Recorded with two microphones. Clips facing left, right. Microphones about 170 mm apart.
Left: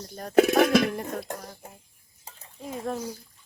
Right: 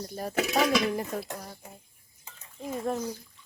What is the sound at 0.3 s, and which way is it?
Speech, 55° left (ahead or behind).